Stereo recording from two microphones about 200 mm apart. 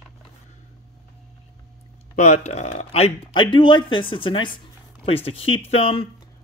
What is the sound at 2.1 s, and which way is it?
Speech, 35° left (ahead or behind).